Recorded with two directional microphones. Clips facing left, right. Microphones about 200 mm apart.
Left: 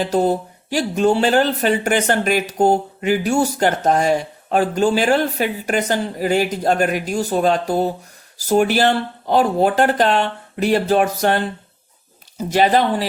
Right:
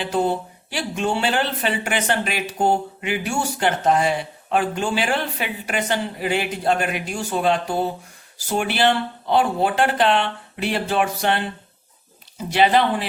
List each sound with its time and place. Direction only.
0.0 s speech: 40° left (ahead or behind)